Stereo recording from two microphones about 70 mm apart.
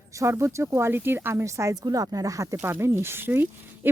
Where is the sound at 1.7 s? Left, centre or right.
Right.